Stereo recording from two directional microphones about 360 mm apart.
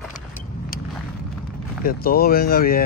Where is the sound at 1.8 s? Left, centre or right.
Left.